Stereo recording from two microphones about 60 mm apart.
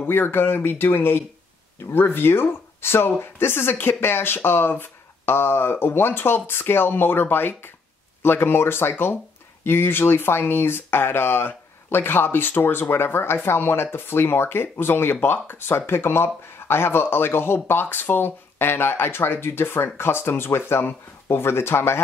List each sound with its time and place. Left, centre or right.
0.0 s speech: left